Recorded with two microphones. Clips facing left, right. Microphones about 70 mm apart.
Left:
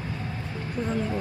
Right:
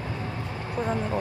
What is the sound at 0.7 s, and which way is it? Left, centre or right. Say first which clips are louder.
Speech: right 1 dB; right.